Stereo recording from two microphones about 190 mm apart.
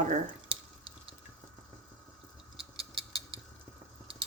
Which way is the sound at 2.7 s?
30° right (ahead or behind).